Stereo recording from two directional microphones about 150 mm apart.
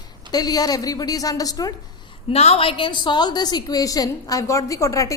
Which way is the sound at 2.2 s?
45° left (ahead or behind).